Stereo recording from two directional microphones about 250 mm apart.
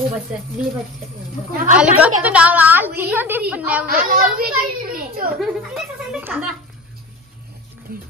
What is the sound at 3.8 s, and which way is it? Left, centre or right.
A child's voice, right.